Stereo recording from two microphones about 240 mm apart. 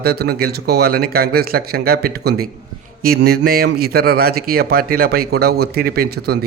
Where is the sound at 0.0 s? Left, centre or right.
Right.